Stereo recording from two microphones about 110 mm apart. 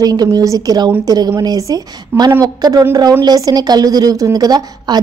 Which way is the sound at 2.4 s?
35° right (ahead or behind).